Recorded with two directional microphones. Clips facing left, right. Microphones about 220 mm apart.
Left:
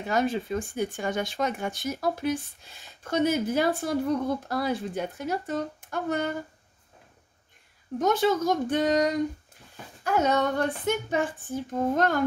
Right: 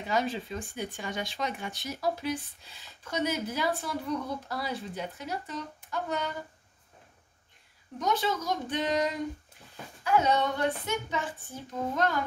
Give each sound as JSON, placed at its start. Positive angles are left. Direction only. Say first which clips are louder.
{"t": 0.0, "sound": "speech", "louder": "left 4 dB", "side_deg": 50}
{"t": 8.0, "sound": "speech", "louder": "left 6 dB", "side_deg": 50}
{"t": 10.0, "sound": "speech", "louder": "left 2 dB", "side_deg": 45}